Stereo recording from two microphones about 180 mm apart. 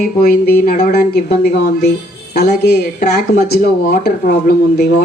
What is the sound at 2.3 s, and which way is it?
A woman's voice, 60° left (ahead or behind).